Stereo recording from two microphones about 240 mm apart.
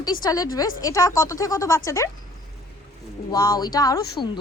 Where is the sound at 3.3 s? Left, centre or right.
Centre.